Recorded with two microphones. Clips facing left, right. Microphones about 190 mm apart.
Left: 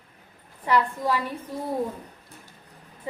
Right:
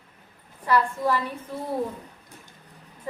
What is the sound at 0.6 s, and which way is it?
Speech, 15° left (ahead or behind).